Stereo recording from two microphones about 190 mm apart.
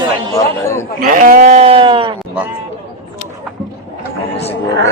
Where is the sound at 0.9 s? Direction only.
45° right (ahead or behind); by 2.1 s 25° right (ahead or behind).